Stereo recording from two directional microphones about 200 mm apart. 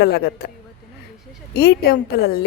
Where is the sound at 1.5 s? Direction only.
50° left (ahead or behind).